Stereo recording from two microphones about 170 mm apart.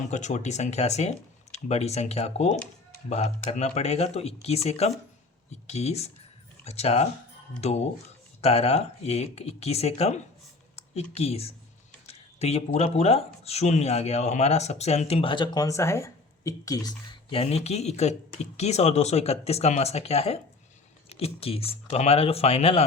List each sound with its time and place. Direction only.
0.1 s speech: 45° left (ahead or behind)
15.5 s speech: 20° left (ahead or behind); by 22.8 s 35° left (ahead or behind)